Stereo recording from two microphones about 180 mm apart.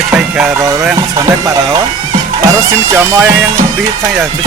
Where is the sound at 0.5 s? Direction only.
15° right (ahead or behind).